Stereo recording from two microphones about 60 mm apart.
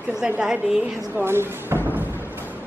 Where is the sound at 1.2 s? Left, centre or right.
Right.